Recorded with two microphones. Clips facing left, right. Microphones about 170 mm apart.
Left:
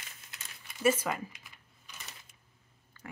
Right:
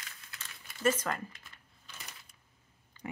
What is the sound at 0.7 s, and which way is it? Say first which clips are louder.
Speech: left 2 dB; 10° left (ahead or behind).